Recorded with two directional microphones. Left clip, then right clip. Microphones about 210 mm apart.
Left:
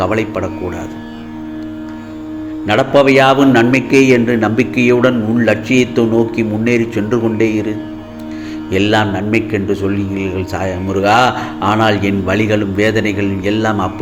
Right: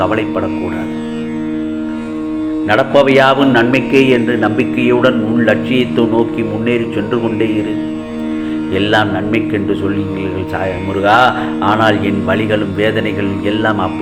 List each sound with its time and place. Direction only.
0.0 s a man's voice: 30° left (ahead or behind)
2.6 s a man's voice: 35° left (ahead or behind)
8.7 s a man's voice: 35° left (ahead or behind)